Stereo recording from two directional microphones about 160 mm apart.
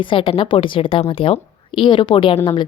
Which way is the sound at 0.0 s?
35° left (ahead or behind).